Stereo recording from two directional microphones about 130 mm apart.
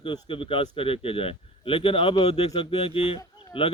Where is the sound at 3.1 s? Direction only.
40° left (ahead or behind).